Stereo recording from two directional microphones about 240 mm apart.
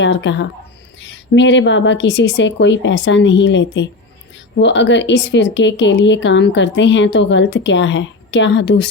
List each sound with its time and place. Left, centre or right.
0.0 s speech: left